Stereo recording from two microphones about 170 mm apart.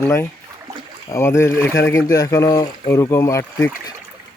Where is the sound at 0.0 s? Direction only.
15° left (ahead or behind).